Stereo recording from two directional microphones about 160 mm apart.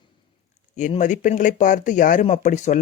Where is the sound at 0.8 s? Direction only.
50° left (ahead or behind).